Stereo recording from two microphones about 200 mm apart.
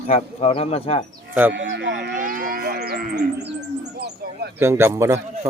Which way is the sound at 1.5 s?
60° right (ahead or behind).